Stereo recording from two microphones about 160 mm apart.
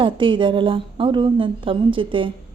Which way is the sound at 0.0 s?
30° right (ahead or behind).